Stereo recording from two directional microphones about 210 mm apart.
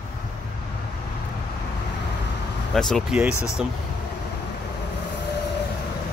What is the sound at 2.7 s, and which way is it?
Speech, centre (ahead or behind).